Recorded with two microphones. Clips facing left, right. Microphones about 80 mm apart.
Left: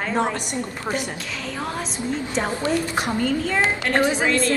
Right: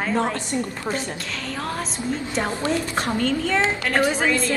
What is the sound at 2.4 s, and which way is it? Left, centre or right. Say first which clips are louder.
A woman's voice: left 1 dB; centre.